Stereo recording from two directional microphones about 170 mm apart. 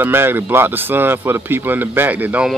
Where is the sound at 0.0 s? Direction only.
15° right (ahead or behind).